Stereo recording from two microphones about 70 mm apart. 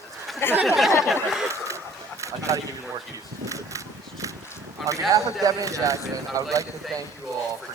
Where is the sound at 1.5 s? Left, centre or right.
Right.